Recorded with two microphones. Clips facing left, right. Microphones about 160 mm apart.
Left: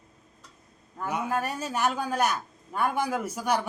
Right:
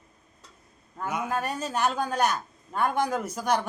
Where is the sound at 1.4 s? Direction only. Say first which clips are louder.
Right 1 dB; 10° left (ahead or behind).